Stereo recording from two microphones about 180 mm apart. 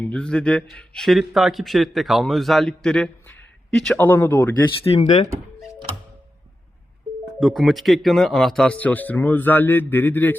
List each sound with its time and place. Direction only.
0.0 s a man's voice: 5° left (ahead or behind)
4.8 s speech: 30° left (ahead or behind)
7.3 s speech: centre (ahead or behind)